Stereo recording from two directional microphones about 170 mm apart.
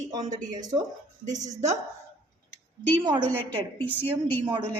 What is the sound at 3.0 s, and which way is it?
Speech, 25° right (ahead or behind).